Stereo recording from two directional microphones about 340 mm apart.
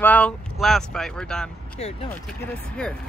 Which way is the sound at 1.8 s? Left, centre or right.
Centre.